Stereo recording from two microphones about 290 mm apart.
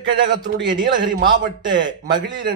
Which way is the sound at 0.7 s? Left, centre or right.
Centre.